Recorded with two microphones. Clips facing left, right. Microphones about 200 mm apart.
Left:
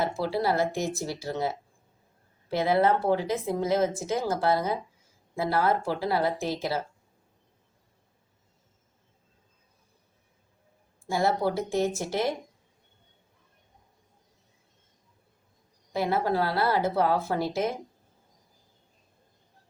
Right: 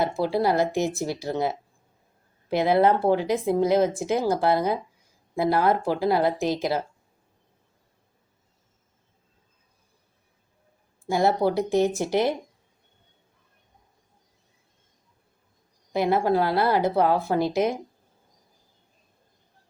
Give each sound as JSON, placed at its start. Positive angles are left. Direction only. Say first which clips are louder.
{"t": 0.0, "sound": "speech", "louder": "right 4 dB", "side_deg": -15}
{"t": 11.1, "sound": "speech", "louder": "right 4 dB", "side_deg": -15}
{"t": 15.9, "sound": "speech", "louder": "right 5 dB", "side_deg": -15}